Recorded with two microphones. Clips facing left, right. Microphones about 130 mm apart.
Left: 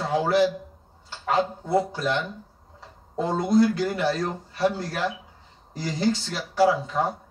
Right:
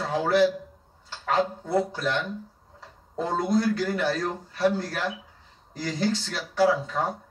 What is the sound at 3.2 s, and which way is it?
Speech, 20° left (ahead or behind).